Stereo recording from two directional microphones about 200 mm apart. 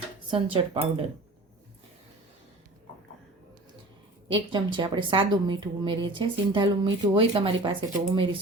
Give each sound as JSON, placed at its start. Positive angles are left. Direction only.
{"t": 0.3, "sound": "a woman's voice", "side_deg": -25}
{"t": 4.3, "sound": "a woman's voice", "side_deg": -25}